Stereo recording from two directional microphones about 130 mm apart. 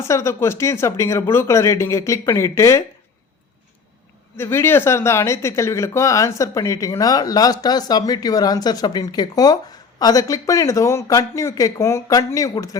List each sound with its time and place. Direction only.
0.0 s speech: 20° left (ahead or behind)
4.4 s speech: 15° left (ahead or behind)